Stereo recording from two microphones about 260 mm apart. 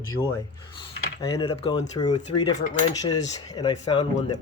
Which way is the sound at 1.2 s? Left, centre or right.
Centre.